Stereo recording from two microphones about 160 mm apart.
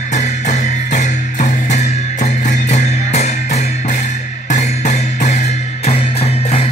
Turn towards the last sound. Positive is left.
turn(degrees=40)  # may be behind; listen again after turning